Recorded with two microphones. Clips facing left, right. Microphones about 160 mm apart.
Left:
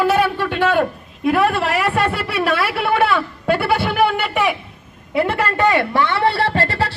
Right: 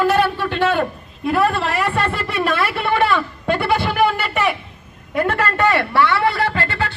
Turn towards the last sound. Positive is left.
turn(degrees=35)  # may be behind; listen again after turning